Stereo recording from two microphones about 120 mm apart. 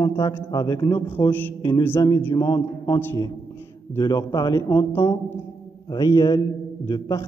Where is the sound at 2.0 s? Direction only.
20° left (ahead or behind).